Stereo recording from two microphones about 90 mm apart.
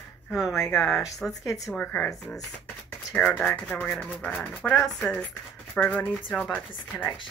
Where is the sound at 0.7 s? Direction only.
Centre (ahead or behind).